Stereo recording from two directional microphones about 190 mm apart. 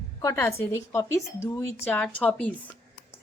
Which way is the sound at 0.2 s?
15° left (ahead or behind).